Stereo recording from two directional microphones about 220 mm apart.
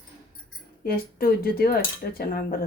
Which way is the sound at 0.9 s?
40° left (ahead or behind).